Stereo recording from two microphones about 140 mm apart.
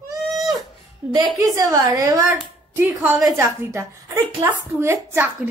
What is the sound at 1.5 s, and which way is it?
Speech, 25° right (ahead or behind).